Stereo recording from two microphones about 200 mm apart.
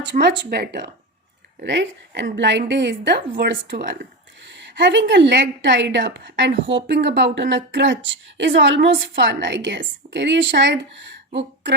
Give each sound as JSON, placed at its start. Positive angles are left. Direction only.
{"t": 0.0, "sound": "a woman's voice", "side_deg": -60}